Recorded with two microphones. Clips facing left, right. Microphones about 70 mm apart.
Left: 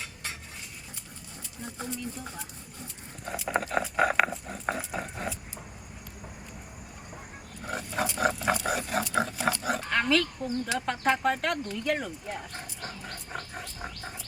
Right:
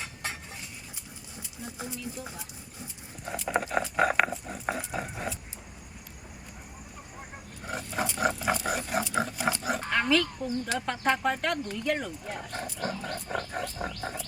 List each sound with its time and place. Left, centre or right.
1.6 s speech: centre
7.6 s a sound: centre
10.8 s speech: centre
12.8 s dog: right
13.3 s wild animals: right
13.8 s a sound: right